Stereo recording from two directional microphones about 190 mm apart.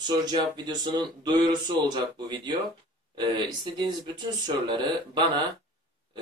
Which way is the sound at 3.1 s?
25° right (ahead or behind).